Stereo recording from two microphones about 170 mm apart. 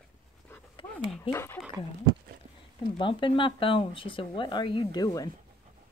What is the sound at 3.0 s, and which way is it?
Speech, 30° left (ahead or behind).